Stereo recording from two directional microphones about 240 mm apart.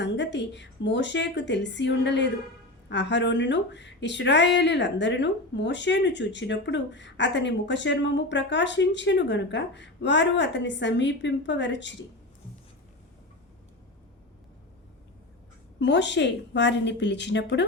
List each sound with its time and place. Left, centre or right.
0.0 s speech: left
15.8 s speech: left